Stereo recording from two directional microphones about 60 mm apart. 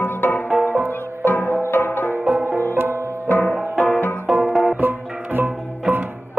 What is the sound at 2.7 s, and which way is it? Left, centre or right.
Music, right.